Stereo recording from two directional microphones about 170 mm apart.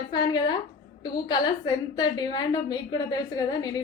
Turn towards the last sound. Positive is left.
turn(degrees=20)  # may be behind; listen again after turning